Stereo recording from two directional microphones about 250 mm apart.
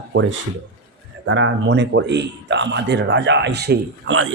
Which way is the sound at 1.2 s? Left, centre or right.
Right.